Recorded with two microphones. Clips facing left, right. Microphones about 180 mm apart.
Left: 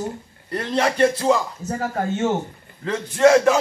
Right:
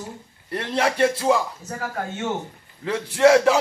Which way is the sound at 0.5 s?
5° right (ahead or behind).